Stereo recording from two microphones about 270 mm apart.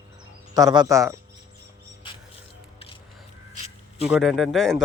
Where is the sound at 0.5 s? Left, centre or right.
Centre.